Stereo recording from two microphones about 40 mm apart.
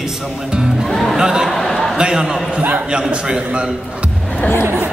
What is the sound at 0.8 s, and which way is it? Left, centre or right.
Music, centre.